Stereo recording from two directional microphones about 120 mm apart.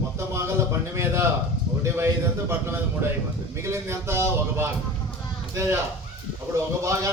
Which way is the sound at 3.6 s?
20° right (ahead or behind).